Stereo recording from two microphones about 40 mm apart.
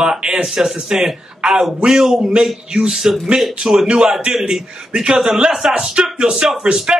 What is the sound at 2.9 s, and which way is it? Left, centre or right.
A man's voice, centre.